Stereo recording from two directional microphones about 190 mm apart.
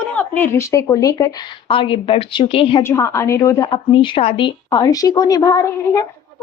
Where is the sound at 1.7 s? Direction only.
25° left (ahead or behind).